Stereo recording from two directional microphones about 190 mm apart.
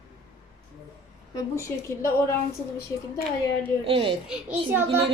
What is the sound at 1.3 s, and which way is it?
A woman's voice, 15° left (ahead or behind).